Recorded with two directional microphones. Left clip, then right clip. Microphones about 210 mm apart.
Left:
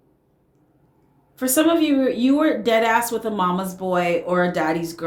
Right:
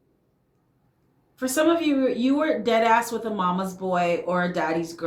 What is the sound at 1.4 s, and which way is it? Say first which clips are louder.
Speech: left 4 dB; 35° left (ahead or behind).